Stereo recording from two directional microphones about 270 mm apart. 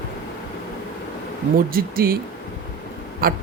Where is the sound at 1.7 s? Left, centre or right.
Right.